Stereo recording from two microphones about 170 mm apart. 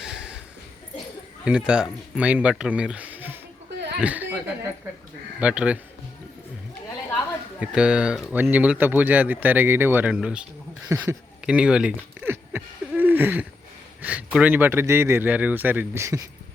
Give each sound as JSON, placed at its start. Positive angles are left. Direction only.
{"t": 0.0, "sound": "a sound", "side_deg": -5}
{"t": 1.5, "sound": "speech", "side_deg": -5}
{"t": 5.4, "sound": "speech", "side_deg": -5}
{"t": 7.6, "sound": "speech", "side_deg": -5}
{"t": 10.8, "sound": "speech", "side_deg": -15}
{"t": 11.4, "sound": "a sound", "side_deg": -5}
{"t": 14.0, "sound": "speech", "side_deg": -10}